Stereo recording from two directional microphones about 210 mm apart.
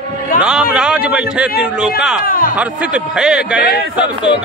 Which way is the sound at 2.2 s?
40° left (ahead or behind).